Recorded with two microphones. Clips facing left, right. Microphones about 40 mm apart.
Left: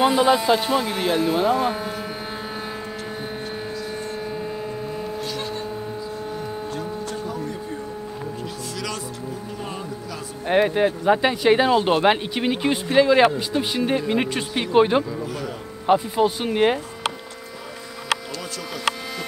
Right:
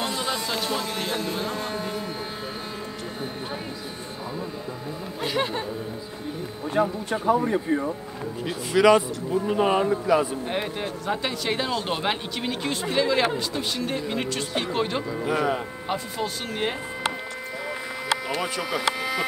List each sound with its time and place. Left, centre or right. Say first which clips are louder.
0.0 s speech: left 10 dB; centre
5.2 s music: right 3 dB; right
6.7 s a man's voice: right 5 dB; right
8.7 s speech: right 16 dB; right
9.5 s a man's voice: right 10 dB; right
10.5 s speech: left 10 dB; left
15.0 s speech: right 4 dB; right
15.9 s speech: left 11 dB; left
18.3 s speech: right 5 dB; right